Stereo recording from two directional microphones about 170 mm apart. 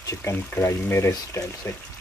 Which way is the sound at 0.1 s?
15° left (ahead or behind).